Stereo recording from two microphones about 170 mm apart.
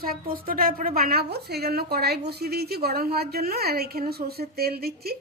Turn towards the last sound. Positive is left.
turn(degrees=-65)  # may be behind; listen again after turning